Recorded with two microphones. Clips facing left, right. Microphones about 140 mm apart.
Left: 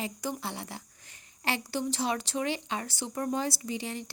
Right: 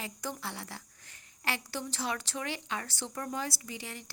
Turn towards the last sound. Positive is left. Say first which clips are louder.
# left 8 dB
turn(degrees=25)  # may be behind; listen again after turning